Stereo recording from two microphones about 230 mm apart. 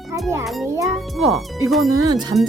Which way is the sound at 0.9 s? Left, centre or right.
Centre.